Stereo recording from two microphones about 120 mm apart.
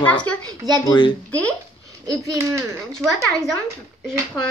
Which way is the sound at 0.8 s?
40° left (ahead or behind).